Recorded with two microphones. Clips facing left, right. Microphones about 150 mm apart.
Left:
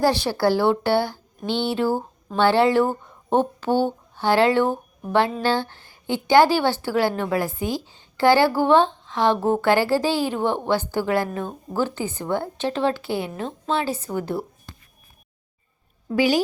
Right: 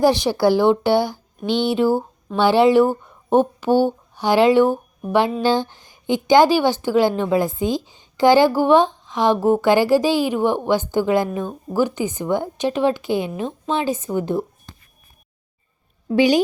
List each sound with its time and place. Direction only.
0.0 s a woman's voice: 15° right (ahead or behind)
16.0 s a woman's voice: 20° right (ahead or behind)